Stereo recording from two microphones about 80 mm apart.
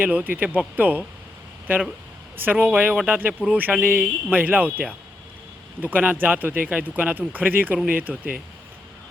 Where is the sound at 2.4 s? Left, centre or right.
Right.